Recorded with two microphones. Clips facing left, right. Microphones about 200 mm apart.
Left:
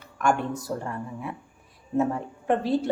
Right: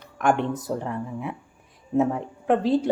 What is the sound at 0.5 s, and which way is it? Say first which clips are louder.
Speech: right 3 dB; 20° right (ahead or behind).